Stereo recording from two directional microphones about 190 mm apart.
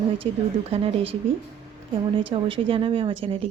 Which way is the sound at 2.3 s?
25° right (ahead or behind).